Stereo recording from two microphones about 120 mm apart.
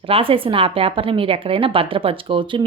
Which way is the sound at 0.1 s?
50° right (ahead or behind).